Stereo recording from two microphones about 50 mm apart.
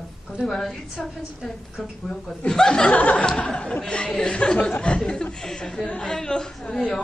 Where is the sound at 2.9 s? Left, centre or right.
Left.